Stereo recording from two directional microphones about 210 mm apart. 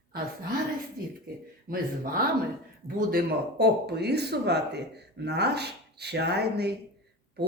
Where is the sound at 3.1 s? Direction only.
50° right (ahead or behind).